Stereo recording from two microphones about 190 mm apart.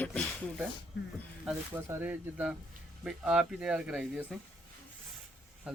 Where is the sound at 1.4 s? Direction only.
10° right (ahead or behind).